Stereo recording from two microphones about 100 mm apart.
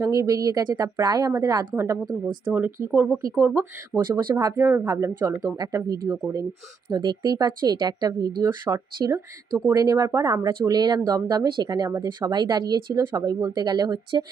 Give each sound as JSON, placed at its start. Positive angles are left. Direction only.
{"t": 0.0, "sound": "speech", "side_deg": -35}
{"t": 3.9, "sound": "speech", "side_deg": -35}
{"t": 9.0, "sound": "speech", "side_deg": -35}
{"t": 10.5, "sound": "speech", "side_deg": -45}